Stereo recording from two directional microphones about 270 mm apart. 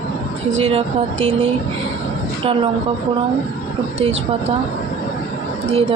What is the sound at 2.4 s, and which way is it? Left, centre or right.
Speech, centre.